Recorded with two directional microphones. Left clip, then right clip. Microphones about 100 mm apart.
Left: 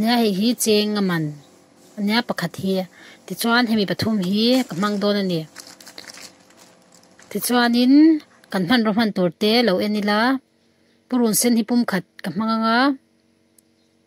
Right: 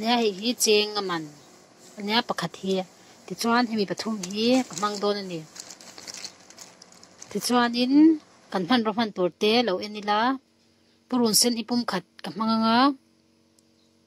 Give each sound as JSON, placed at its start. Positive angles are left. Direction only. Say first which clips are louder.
{"t": 0.0, "sound": "a woman's voice", "louder": "left 4 dB", "side_deg": 30}
{"t": 5.9, "sound": "a sound", "louder": "even", "side_deg": 35}
{"t": 7.2, "sound": "speech", "louder": "left 4 dB", "side_deg": 35}
{"t": 7.9, "sound": "speech", "louder": "left 4 dB", "side_deg": 15}
{"t": 8.2, "sound": "a woman's voice", "louder": "left 4 dB", "side_deg": 35}